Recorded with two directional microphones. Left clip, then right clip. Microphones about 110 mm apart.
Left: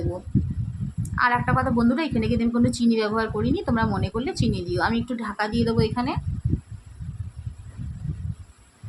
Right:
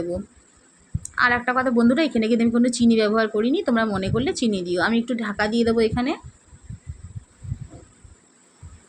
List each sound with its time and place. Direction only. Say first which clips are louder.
1.0 s a woman's voice: right 2 dB; 35° right (ahead or behind)